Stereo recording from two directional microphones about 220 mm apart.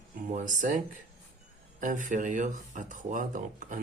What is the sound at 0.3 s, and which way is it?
Speech, 35° right (ahead or behind).